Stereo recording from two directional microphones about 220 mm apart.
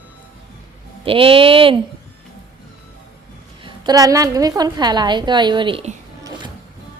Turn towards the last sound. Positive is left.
turn(degrees=-20)  # may be behind; listen again after turning